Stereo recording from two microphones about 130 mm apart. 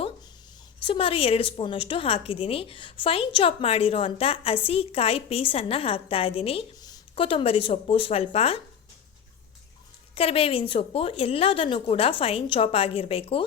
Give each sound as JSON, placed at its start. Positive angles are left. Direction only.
{"t": 0.8, "sound": "a woman's voice", "side_deg": 45}
{"t": 6.7, "sound": "a sound", "side_deg": 30}
{"t": 7.3, "sound": "a woman's voice", "side_deg": 45}
{"t": 10.2, "sound": "a woman's voice", "side_deg": 45}